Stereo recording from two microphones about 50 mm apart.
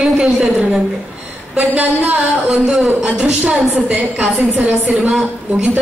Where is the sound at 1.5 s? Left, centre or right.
Right.